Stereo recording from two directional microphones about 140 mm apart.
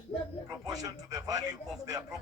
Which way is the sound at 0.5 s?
25° right (ahead or behind).